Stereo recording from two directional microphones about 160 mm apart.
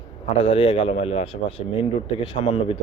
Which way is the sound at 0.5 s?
35° left (ahead or behind).